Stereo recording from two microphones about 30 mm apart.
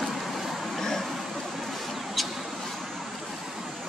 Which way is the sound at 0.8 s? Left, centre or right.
Centre.